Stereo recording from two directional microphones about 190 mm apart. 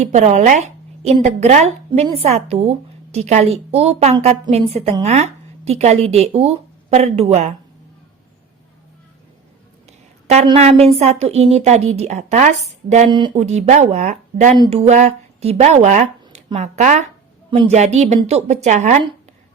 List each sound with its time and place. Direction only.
0.0 s a woman's voice: 35° right (ahead or behind)
10.6 s a woman's voice: 35° right (ahead or behind)
13.1 s speech: 25° right (ahead or behind)
13.3 s a woman's voice: 35° right (ahead or behind)